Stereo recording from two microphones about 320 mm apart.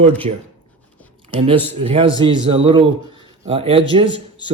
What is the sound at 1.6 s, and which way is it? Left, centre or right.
Speech, centre.